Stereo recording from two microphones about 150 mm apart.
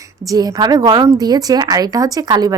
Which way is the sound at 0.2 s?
25° right (ahead or behind).